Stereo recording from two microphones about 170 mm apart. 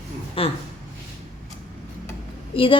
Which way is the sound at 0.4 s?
35° left (ahead or behind).